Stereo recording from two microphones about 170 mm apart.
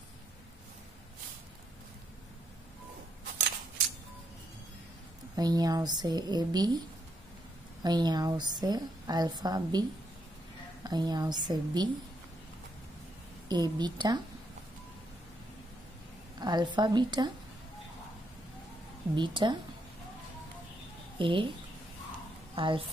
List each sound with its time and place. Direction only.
5.3 s a woman's voice: 20° right (ahead or behind)
7.8 s a woman's voice: 25° right (ahead or behind)
13.5 s a woman's voice: 25° right (ahead or behind)
16.3 s a woman's voice: 25° right (ahead or behind)
19.1 s a woman's voice: 30° right (ahead or behind)
21.2 s a woman's voice: 30° right (ahead or behind)
22.6 s a woman's voice: 30° right (ahead or behind)